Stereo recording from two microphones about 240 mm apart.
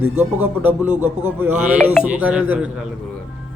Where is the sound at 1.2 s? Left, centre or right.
Centre.